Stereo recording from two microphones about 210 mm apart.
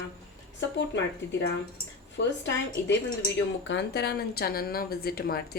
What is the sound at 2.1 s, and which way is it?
A woman's voice, 60° left (ahead or behind).